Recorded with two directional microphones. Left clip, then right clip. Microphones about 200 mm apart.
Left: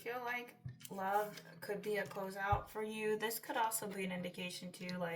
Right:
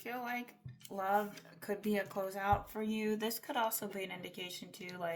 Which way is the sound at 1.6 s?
40° right (ahead or behind).